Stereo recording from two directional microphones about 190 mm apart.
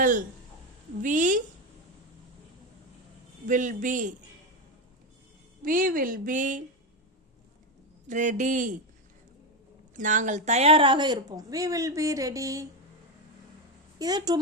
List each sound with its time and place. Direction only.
0.0 s a woman's voice: 45° right (ahead or behind)
3.4 s speech: 45° right (ahead or behind)
5.6 s speech: 45° right (ahead or behind)
8.0 s a man's voice: 40° right (ahead or behind)
9.9 s a woman's voice: 40° right (ahead or behind); by 12.6 s 15° right (ahead or behind)
14.0 s a woman's voice: 20° right (ahead or behind)